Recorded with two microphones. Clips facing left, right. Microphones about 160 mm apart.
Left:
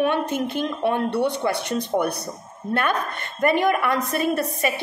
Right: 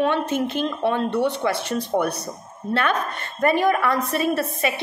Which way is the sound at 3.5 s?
20° left (ahead or behind).